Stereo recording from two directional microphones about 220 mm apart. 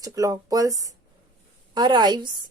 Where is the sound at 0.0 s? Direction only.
15° right (ahead or behind).